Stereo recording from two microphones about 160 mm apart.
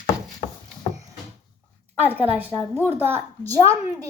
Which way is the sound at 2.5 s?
10° left (ahead or behind).